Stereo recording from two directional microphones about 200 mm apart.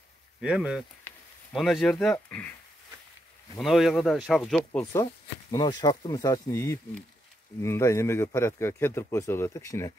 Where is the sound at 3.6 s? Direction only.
Centre (ahead or behind).